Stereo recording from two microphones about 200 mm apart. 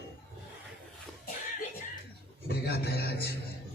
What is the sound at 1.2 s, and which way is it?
Music, 45° left (ahead or behind).